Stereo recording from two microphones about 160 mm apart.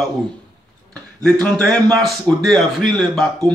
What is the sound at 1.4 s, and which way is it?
A man's voice, 5° left (ahead or behind).